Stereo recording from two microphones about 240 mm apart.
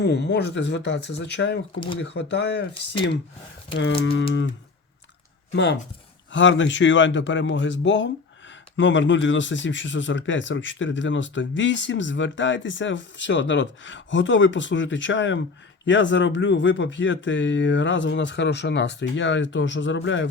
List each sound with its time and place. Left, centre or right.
0.0 s speech: left
3.8 s speech: left
5.5 s speech: left